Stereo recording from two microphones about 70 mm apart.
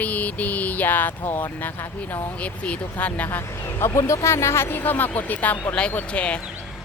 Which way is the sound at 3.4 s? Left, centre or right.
Left.